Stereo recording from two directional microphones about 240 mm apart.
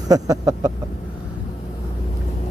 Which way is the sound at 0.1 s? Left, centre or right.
Centre.